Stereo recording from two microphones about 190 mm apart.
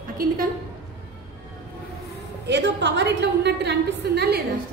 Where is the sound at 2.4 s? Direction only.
65° right (ahead or behind).